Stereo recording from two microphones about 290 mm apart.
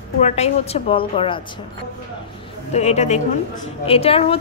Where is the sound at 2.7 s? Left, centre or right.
Left.